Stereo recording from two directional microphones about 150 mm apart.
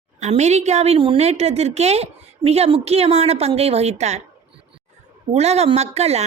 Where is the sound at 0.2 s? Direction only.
50° right (ahead or behind).